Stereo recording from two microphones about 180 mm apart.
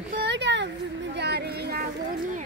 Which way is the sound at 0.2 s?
75° right (ahead or behind).